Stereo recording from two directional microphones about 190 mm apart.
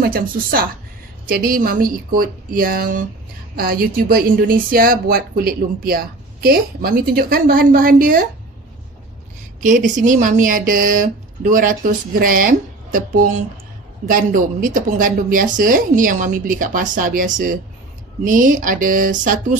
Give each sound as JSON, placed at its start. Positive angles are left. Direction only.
{"t": 0.0, "sound": "a woman's voice", "side_deg": -50}
{"t": 9.6, "sound": "a woman's voice", "side_deg": -40}